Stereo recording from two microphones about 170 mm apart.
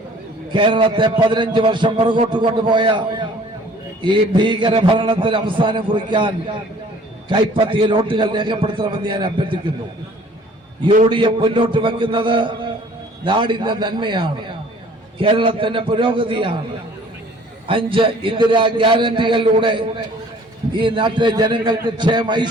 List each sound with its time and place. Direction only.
0.5 s a man's voice: 30° right (ahead or behind)
11.1 s a man's voice: 30° right (ahead or behind)
17.7 s a man's voice: 30° right (ahead or behind)